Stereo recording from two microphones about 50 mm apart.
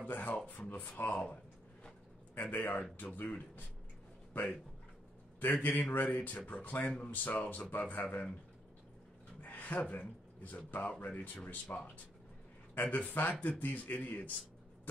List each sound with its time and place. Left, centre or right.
0.0 s speech: left
2.5 s speech: left
9.4 s speech: left
12.8 s speech: left